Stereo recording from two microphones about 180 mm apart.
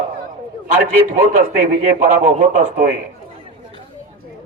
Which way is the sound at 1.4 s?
45° right (ahead or behind).